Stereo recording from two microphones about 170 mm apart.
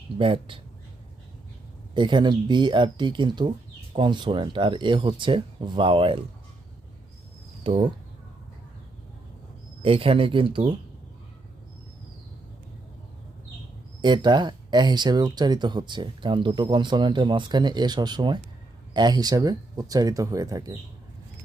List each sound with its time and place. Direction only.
0.2 s speech: 30° right (ahead or behind)
1.9 s speech: 30° right (ahead or behind)
7.6 s speech: 35° right (ahead or behind)
9.8 s speech: 35° right (ahead or behind)
14.0 s speech: 25° right (ahead or behind)